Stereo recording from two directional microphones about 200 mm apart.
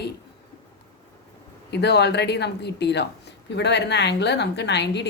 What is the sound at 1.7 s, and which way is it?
A woman's voice, 55° left (ahead or behind).